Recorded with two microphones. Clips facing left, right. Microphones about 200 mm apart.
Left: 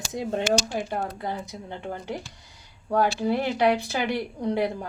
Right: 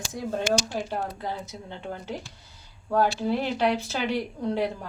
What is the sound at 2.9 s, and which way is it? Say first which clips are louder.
Speech: left 1 dB; 15° left (ahead or behind).